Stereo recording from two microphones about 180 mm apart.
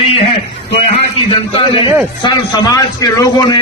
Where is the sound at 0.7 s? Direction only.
35° left (ahead or behind).